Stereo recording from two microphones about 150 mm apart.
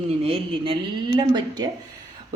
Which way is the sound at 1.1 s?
30° right (ahead or behind).